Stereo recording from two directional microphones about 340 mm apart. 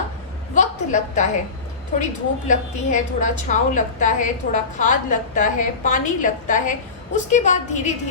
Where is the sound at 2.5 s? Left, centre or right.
Left.